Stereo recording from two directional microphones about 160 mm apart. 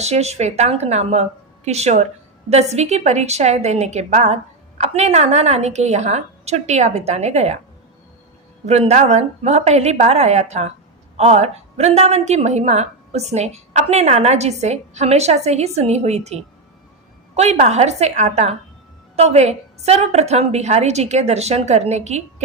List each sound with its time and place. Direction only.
0.0 s a woman's voice: 40° right (ahead or behind)
8.6 s a woman's voice: 45° right (ahead or behind)